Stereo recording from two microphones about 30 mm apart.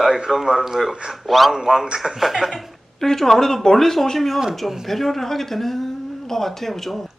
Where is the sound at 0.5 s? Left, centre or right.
Centre.